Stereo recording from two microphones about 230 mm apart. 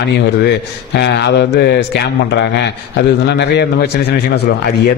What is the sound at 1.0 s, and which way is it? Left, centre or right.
A man's voice, left.